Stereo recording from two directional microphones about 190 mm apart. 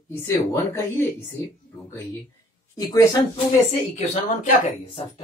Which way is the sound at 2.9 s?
15° left (ahead or behind).